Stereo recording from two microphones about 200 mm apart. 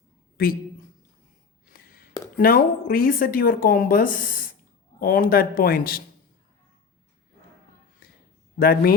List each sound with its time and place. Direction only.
0.4 s a woman's voice: 45° left (ahead or behind)
1.6 s a sound: 45° left (ahead or behind)
2.4 s speech: 45° left (ahead or behind)
8.5 s speech: 50° left (ahead or behind)